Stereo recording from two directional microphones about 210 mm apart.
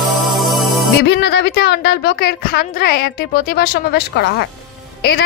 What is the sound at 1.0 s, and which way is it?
A woman's voice, 55° left (ahead or behind).